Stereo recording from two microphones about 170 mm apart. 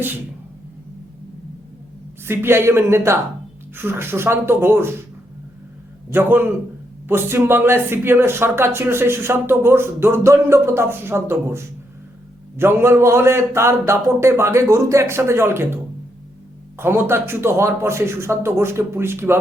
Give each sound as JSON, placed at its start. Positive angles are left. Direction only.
{"t": 2.2, "sound": "speech", "side_deg": -15}
{"t": 6.1, "sound": "speech", "side_deg": -10}